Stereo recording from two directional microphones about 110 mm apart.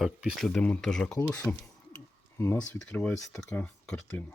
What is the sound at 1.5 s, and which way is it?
Speech, 15° left (ahead or behind).